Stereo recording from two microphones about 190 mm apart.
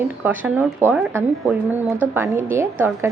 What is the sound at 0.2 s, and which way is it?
A woman's voice, 10° right (ahead or behind).